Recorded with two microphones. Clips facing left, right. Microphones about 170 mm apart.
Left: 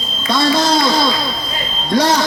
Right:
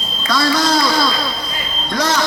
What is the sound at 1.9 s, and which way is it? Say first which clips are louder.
Speech: left 5 dB; 30° left (ahead or behind).